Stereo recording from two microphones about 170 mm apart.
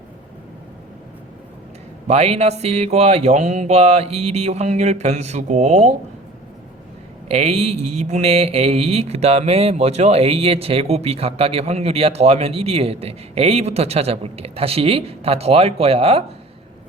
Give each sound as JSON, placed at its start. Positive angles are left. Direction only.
{"t": 2.0, "sound": "speech", "side_deg": -40}
{"t": 7.3, "sound": "speech", "side_deg": -40}